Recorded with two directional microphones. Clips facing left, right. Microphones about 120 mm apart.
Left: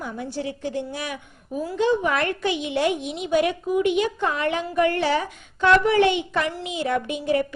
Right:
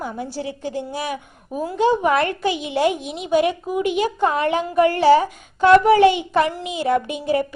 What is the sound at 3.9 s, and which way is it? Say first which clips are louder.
A woman's voice: right 4 dB; 40° right (ahead or behind).